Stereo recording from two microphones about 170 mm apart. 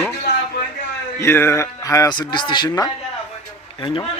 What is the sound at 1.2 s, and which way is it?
Speech, 15° left (ahead or behind).